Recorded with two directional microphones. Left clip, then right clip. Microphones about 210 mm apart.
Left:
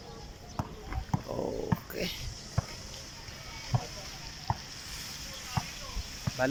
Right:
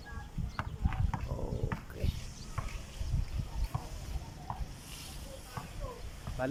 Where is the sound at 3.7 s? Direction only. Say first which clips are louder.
Left 7 dB; 35° left (ahead or behind).